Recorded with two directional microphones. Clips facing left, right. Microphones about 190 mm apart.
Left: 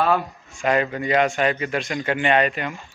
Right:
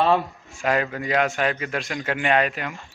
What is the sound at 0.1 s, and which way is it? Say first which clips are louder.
Speech: right 1 dB; centre (ahead or behind).